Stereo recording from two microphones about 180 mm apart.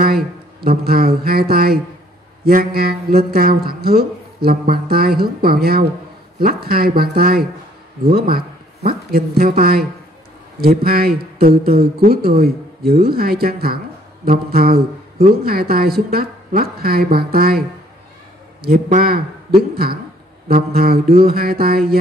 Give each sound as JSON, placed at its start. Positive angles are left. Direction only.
{"t": 0.0, "sound": "speech", "side_deg": -55}
{"t": 14.5, "sound": "a sound", "side_deg": -55}
{"t": 15.4, "sound": "speech", "side_deg": -55}